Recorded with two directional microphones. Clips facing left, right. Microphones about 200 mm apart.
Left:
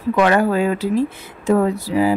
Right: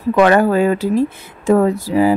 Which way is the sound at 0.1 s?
50° right (ahead or behind).